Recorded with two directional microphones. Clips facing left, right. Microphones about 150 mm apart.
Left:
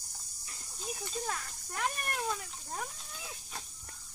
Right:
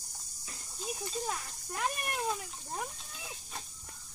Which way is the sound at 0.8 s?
5° right (ahead or behind).